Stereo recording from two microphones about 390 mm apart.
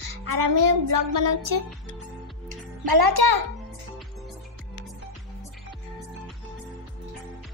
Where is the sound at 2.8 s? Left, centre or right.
Right.